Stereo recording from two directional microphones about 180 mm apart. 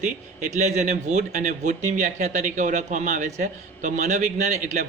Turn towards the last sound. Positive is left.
turn(degrees=-45)  # may be behind; listen again after turning